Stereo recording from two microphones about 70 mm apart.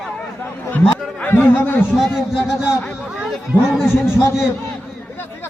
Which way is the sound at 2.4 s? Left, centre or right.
Centre.